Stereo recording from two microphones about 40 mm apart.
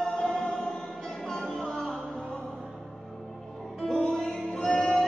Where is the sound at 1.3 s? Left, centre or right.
Centre.